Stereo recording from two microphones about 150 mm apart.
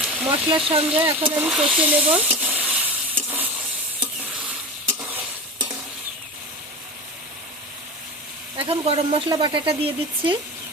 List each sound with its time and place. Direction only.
0.0 s a sound: 5° right (ahead or behind)
0.4 s speech: 35° right (ahead or behind)
1.4 s speech: 5° right (ahead or behind)
2.4 s frying: 5° right (ahead or behind)
3.2 s sizzle: 10° right (ahead or behind)
4.9 s stir: 15° right (ahead or behind)
8.5 s speech: 40° right (ahead or behind)